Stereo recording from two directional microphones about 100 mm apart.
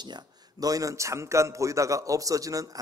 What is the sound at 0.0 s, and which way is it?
A man's voice, 40° right (ahead or behind).